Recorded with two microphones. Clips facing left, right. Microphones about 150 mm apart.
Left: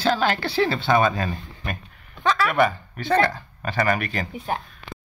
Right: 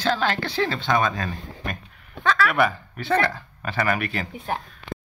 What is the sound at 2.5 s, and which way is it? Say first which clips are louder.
Speech: left 2 dB; 5° right (ahead or behind).